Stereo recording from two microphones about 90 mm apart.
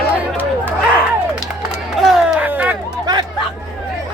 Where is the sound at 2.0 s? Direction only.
5° right (ahead or behind).